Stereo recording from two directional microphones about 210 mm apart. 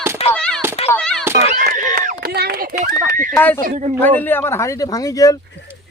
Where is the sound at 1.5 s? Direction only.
35° right (ahead or behind).